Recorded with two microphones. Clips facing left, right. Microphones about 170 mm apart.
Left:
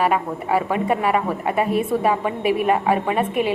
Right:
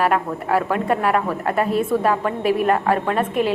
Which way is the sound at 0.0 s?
Centre (ahead or behind).